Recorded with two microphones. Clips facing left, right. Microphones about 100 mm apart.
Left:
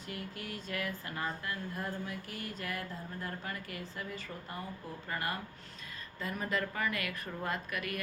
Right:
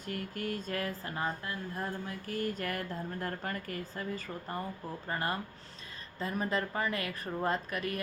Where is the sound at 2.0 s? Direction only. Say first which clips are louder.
Right 6 dB; 40° right (ahead or behind).